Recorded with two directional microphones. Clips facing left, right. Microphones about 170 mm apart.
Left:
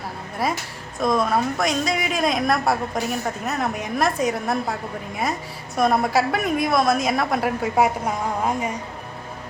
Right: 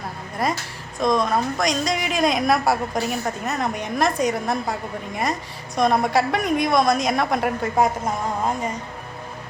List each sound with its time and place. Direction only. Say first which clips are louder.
0.4 s a woman's voice: right 1 dB; 5° left (ahead or behind)